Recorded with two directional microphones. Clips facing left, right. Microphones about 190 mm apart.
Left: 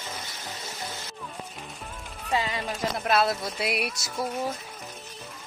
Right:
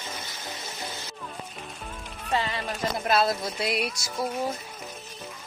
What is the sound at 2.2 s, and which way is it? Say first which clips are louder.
Music: even; 10° left (ahead or behind).